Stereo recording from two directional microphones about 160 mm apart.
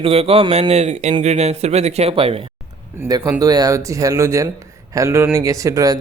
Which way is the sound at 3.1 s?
20° right (ahead or behind).